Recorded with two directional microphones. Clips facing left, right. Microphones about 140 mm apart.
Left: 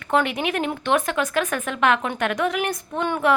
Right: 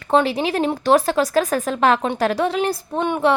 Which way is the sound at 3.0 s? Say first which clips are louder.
Right 3 dB; 20° right (ahead or behind).